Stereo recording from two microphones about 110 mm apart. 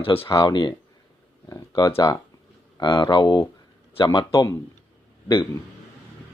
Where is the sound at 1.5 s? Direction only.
30° left (ahead or behind).